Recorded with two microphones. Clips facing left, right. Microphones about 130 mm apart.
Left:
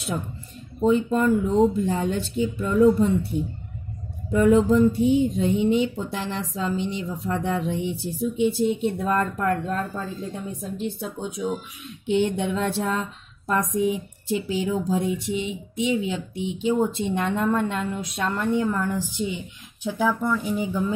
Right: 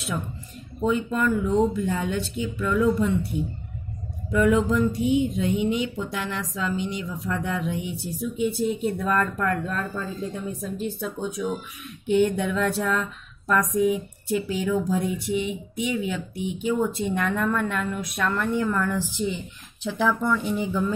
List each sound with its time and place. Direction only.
0.8 s speech: 35° left (ahead or behind)
4.3 s a woman's voice: 30° left (ahead or behind); by 20.8 s 15° left (ahead or behind)